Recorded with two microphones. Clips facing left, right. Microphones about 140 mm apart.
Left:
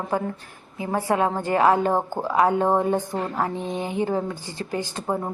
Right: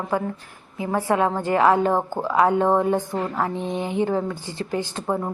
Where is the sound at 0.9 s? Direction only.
30° left (ahead or behind).